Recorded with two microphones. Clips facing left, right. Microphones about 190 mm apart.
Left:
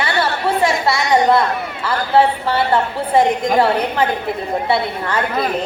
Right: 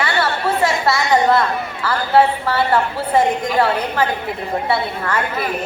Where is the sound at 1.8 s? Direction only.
20° left (ahead or behind).